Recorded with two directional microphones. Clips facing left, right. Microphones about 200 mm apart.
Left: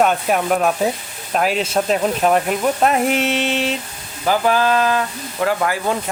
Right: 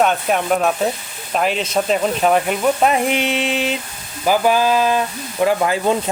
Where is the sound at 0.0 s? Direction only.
5° left (ahead or behind).